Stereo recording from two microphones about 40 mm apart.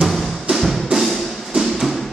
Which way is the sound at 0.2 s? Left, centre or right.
Centre.